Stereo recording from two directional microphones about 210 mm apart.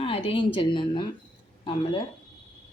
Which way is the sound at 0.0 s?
25° left (ahead or behind).